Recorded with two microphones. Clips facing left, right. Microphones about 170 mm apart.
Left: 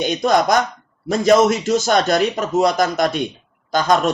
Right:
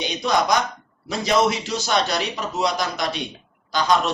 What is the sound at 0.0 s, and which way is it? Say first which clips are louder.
Speech: left 5 dB; 50° left (ahead or behind).